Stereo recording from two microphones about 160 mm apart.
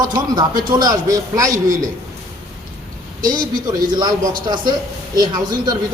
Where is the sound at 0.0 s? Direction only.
25° right (ahead or behind).